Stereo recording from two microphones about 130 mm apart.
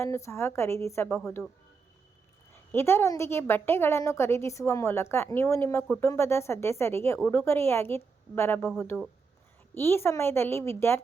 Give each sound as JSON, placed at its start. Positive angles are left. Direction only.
{"t": 0.0, "sound": "a woman's voice", "side_deg": 20}
{"t": 2.7, "sound": "a woman's voice", "side_deg": 20}
{"t": 8.9, "sound": "speech", "side_deg": 0}
{"t": 9.7, "sound": "a woman's voice", "side_deg": 20}